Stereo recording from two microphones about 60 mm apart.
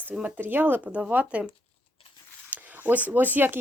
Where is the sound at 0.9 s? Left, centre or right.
Right.